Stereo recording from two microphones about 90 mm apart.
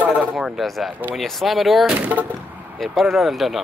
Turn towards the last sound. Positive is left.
turn(degrees=0)  # may be behind; listen again after turning